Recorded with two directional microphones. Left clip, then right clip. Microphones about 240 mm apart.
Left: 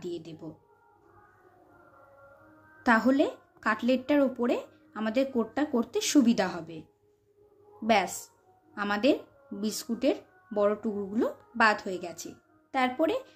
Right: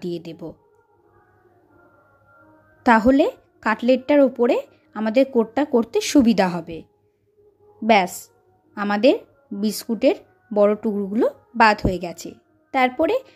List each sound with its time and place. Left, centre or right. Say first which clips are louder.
0.0 s speech: right 8 dB; right
2.8 s speech: right 9 dB; right